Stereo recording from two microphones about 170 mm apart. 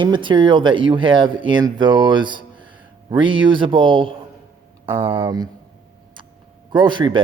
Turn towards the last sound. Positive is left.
turn(degrees=-25)  # may be behind; listen again after turning